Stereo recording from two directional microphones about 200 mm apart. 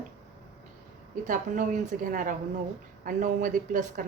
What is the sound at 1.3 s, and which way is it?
A woman's voice, 40° right (ahead or behind).